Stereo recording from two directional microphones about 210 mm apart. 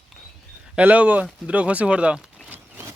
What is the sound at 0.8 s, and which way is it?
Speech, 5° right (ahead or behind).